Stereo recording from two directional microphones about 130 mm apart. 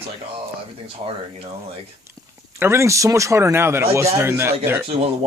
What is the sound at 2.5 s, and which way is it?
Speech, 20° right (ahead or behind).